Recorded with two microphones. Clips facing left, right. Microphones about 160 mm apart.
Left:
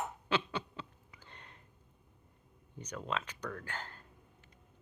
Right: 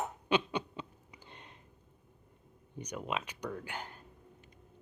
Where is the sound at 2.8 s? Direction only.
15° right (ahead or behind).